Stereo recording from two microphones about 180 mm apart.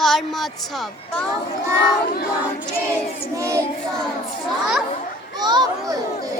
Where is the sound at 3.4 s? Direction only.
15° right (ahead or behind).